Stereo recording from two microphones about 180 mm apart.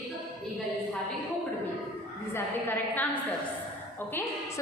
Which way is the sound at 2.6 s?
10° left (ahead or behind).